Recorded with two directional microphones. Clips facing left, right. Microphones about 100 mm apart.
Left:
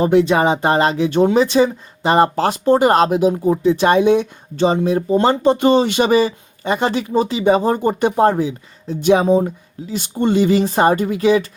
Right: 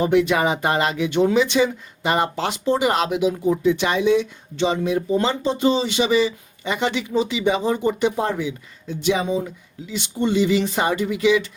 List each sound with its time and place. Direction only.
0.0 s speech: 30° left (ahead or behind)
3.8 s speech: 50° left (ahead or behind)
5.2 s speech: 55° left (ahead or behind)